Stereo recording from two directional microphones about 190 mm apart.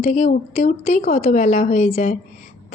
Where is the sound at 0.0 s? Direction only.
35° left (ahead or behind).